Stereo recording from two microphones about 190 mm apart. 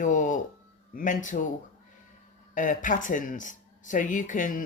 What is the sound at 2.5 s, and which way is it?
Speech, 45° left (ahead or behind).